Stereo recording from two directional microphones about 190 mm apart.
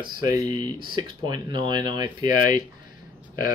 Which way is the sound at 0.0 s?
15° right (ahead or behind).